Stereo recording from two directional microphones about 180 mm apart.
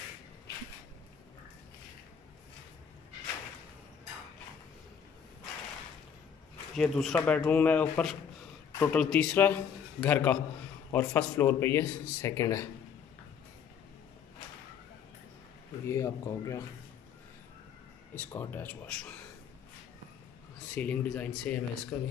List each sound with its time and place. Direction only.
6.7 s speech: centre (ahead or behind); by 12.6 s 15° left (ahead or behind)
15.8 s speech: 15° left (ahead or behind)
18.3 s speech: 10° left (ahead or behind)
20.7 s speech: 5° left (ahead or behind)